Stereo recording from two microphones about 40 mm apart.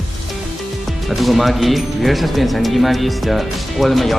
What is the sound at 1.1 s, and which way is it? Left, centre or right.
Speech, centre.